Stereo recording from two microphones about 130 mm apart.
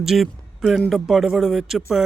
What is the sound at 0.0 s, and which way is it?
Speech, 5° right (ahead or behind).